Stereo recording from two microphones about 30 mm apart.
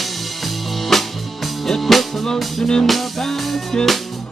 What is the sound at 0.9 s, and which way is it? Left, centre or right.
Music, centre.